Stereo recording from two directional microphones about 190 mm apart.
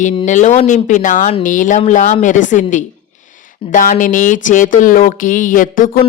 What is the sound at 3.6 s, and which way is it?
A woman's voice, 45° left (ahead or behind).